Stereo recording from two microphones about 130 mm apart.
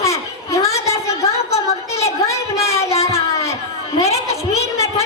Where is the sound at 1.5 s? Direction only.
55° left (ahead or behind).